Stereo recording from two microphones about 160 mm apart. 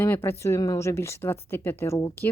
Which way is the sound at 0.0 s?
15° left (ahead or behind).